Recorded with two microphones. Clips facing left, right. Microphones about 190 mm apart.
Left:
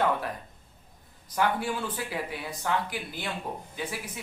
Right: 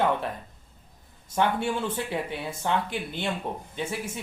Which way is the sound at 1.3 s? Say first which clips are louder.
Right 2 dB; 25° right (ahead or behind).